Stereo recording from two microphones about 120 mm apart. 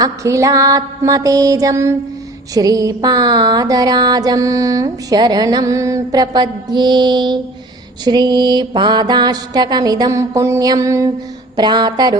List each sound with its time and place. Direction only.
0.0 s music: 25° right (ahead or behind)